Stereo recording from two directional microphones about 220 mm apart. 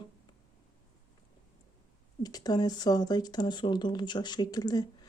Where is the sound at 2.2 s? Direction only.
20° left (ahead or behind).